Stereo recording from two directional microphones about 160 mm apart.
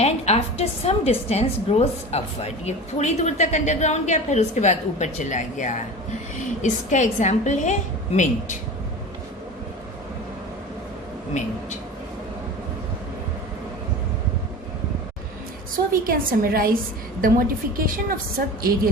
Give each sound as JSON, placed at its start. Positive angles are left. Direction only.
{"t": 0.0, "sound": "a woman's voice", "side_deg": 40}
{"t": 16.0, "sound": "a woman's voice", "side_deg": -65}